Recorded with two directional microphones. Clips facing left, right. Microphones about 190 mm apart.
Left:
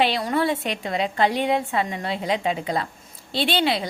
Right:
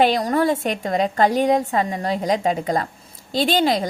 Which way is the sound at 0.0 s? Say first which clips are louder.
Right 4 dB; 40° right (ahead or behind).